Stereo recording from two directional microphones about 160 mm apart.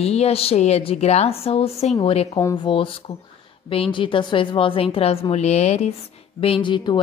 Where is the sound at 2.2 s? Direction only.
25° left (ahead or behind).